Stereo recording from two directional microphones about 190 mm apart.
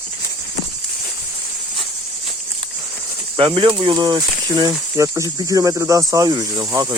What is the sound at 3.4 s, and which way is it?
Speech, 25° right (ahead or behind).